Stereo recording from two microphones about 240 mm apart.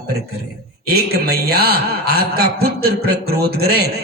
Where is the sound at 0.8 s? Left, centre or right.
Right.